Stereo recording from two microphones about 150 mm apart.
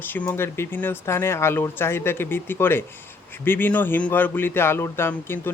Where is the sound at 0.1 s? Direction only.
15° left (ahead or behind).